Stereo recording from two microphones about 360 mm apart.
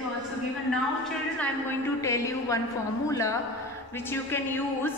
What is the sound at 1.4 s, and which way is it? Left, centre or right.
A man's voice, centre.